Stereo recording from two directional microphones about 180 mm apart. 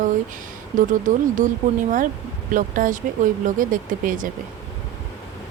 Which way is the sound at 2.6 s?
50° right (ahead or behind).